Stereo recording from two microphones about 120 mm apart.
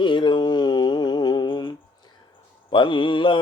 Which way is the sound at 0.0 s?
40° left (ahead or behind).